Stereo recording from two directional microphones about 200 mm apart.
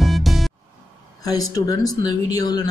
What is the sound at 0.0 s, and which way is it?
Music, centre (ahead or behind).